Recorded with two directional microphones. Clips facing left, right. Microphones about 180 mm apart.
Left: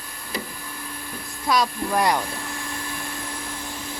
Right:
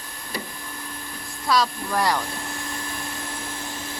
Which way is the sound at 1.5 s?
20° left (ahead or behind).